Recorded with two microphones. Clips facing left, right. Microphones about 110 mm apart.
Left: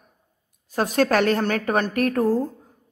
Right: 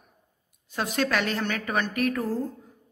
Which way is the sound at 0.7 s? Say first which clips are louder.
Left 7 dB; 45° left (ahead or behind).